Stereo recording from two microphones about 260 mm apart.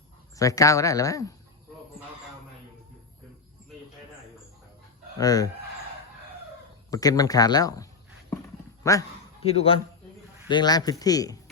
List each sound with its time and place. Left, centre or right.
0.3 s speech: centre
5.1 s speech: centre
6.9 s a man's voice: centre